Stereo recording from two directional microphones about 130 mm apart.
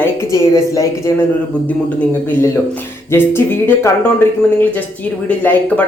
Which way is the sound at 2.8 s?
15° left (ahead or behind).